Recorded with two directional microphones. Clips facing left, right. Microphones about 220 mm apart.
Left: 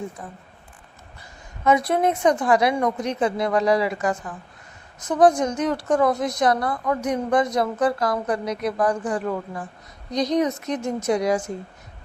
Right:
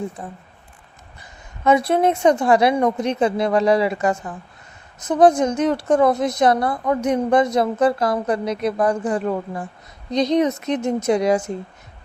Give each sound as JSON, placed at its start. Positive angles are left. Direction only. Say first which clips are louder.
{"t": 0.2, "sound": "a woman's voice", "louder": "right 4 dB", "side_deg": -30}
{"t": 1.6, "sound": "a woman's voice", "louder": "right 3 dB", "side_deg": -25}